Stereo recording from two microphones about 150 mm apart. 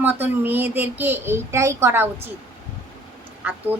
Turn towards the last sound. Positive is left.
turn(degrees=-10)  # may be behind; listen again after turning